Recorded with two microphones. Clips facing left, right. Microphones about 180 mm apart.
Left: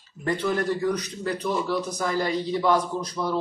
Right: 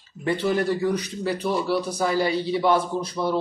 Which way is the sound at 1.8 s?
10° right (ahead or behind).